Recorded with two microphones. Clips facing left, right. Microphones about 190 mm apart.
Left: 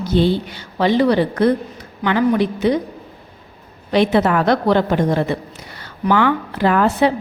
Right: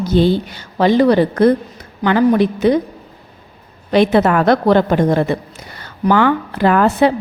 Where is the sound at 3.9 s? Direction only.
50° right (ahead or behind).